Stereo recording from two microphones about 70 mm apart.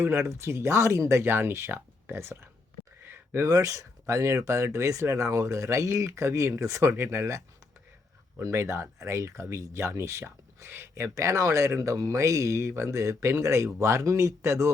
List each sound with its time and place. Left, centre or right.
0.0 s speech: right
3.0 s a sound: right
3.5 s speech: right
6.9 s speech: right